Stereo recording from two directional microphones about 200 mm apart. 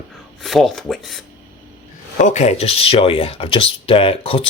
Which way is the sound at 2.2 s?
35° left (ahead or behind).